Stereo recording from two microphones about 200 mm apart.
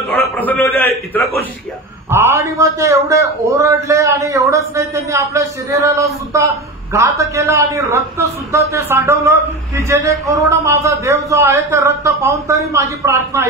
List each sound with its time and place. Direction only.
0.1 s a man's voice: 10° left (ahead or behind)
2.0 s a man's voice: 10° right (ahead or behind)